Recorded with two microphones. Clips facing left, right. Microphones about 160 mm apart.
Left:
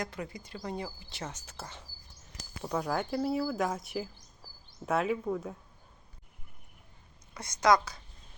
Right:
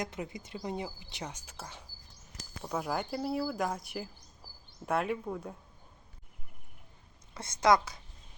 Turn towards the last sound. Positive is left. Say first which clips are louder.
# even
turn(degrees=-25)  # may be behind; listen again after turning